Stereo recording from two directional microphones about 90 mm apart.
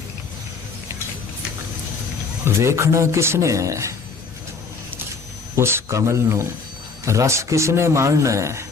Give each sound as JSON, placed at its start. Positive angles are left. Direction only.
{"t": 2.4, "sound": "a man's voice", "side_deg": -30}
{"t": 5.5, "sound": "a man's voice", "side_deg": -30}